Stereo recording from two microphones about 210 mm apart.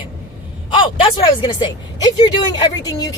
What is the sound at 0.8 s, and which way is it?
Speech, 20° left (ahead or behind).